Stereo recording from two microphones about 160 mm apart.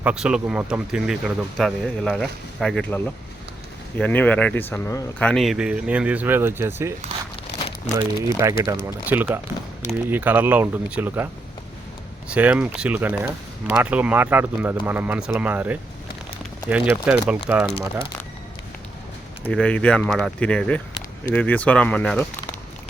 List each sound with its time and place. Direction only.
0.0 s speech: 5° right (ahead or behind); by 5.0 s 15° left (ahead or behind)
5.2 s speech: centre (ahead or behind); by 6.9 s 15° right (ahead or behind)
7.9 s speech: 20° right (ahead or behind)
12.3 s speech: 10° right (ahead or behind)
19.5 s speech: 5° left (ahead or behind)